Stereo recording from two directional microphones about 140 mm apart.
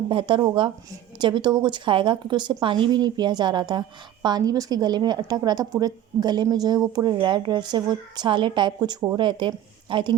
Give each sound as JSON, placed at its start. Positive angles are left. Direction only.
{"t": 0.1, "sound": "a woman's voice", "side_deg": -35}